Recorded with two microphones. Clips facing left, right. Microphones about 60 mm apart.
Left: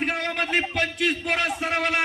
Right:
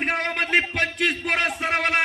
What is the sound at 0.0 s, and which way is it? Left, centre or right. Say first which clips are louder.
Speech: right 1 dB; right.